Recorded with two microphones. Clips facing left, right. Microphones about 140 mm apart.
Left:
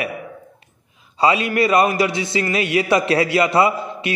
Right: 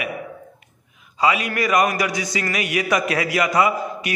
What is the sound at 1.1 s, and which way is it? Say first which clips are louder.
A man's voice: left 3 dB; 30° left (ahead or behind).